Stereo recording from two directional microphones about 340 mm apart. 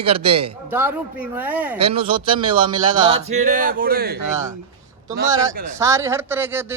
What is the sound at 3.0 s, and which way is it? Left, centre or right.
Speech, centre.